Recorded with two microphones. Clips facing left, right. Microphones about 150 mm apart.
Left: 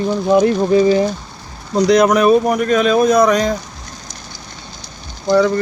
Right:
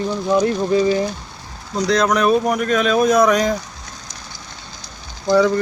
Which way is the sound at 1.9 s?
10° left (ahead or behind).